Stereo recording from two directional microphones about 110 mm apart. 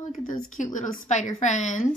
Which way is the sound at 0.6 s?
90° left.